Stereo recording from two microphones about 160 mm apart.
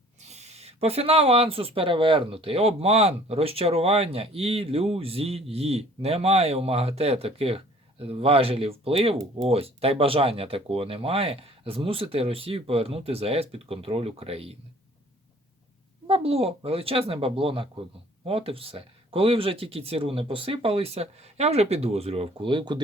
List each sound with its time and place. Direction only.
0.3 s speech: 45° right (ahead or behind)
16.0 s speech: 35° right (ahead or behind)